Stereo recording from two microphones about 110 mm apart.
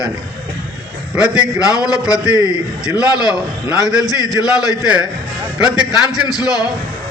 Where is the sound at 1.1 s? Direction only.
10° right (ahead or behind).